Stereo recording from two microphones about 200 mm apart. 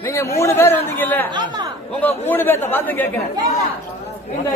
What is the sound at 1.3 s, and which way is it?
Speech, 20° right (ahead or behind).